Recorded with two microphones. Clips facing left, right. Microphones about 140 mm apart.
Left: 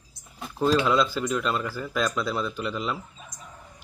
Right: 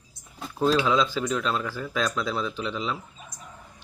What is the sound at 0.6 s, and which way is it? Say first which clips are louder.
Speech: even; 5° right (ahead or behind).